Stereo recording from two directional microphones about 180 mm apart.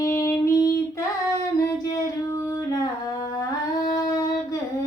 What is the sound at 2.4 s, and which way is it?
Singing, 15° left (ahead or behind).